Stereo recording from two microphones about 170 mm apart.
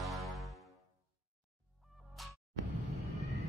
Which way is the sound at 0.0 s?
Centre (ahead or behind).